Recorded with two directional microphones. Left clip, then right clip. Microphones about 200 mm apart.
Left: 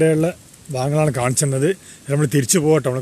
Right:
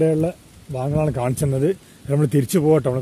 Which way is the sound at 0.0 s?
10° left (ahead or behind).